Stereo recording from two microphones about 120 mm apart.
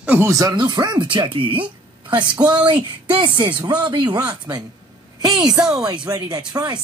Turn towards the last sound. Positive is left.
turn(degrees=-35)  # may be behind; listen again after turning